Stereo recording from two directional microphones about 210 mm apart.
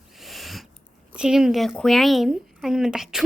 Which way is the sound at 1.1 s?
5° right (ahead or behind).